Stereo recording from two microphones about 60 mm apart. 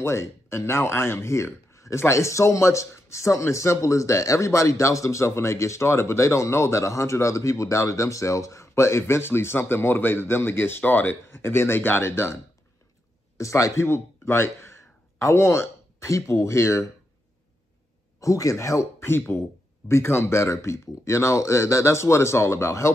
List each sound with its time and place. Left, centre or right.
0.0 s speech: left
10.8 s speech: left
11.2 s speech: left
13.4 s speech: left
13.8 s speech: left
18.2 s speech: left
19.9 s speech: left